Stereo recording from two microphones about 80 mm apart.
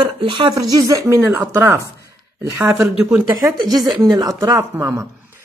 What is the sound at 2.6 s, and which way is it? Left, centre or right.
Speech, centre.